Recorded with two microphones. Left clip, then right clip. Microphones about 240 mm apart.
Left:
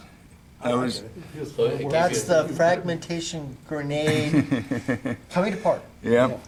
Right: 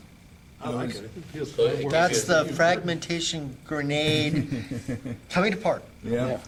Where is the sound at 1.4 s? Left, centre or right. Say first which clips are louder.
Even; centre.